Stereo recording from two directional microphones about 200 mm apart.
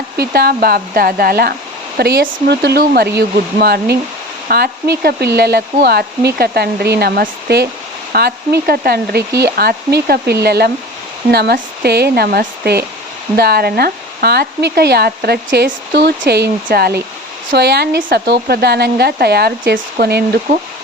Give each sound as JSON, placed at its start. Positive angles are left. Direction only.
{"t": 0.2, "sound": "speech", "side_deg": -50}